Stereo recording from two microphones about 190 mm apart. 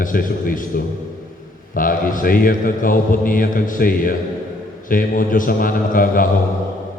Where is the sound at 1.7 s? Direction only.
45° left (ahead or behind).